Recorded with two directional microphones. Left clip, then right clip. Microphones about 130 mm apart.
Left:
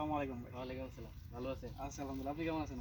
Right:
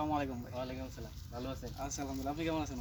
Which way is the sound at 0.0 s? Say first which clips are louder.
Right 4 dB; 5° left (ahead or behind).